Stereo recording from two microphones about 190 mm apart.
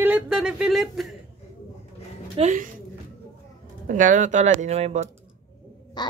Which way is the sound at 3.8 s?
45° right (ahead or behind).